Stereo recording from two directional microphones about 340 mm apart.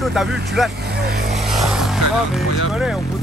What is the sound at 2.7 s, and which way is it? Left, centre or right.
Speech, centre.